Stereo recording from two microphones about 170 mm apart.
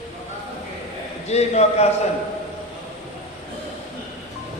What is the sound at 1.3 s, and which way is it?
Chant, 40° left (ahead or behind).